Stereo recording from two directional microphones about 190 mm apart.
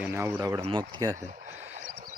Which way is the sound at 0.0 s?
10° right (ahead or behind).